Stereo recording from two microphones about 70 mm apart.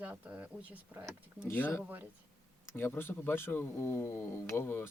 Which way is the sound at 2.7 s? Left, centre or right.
Left.